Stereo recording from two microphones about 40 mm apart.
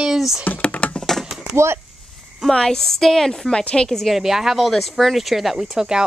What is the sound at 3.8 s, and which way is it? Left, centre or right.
Speech, centre.